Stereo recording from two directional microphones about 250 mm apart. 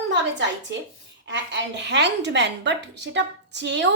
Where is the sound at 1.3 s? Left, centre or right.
Right.